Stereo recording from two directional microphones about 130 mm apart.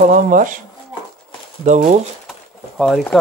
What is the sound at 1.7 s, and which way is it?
Speech, 65° right (ahead or behind).